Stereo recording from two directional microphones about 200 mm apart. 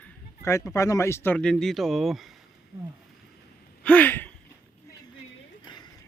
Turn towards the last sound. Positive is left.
turn(degrees=10)  # may be behind; listen again after turning